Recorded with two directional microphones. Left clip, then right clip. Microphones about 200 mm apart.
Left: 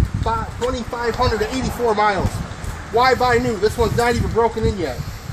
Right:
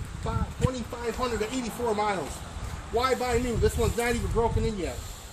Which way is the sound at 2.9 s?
50° right (ahead or behind).